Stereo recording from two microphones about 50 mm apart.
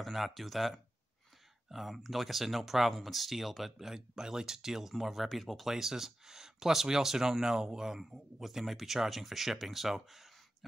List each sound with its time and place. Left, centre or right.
0.0 s speech: centre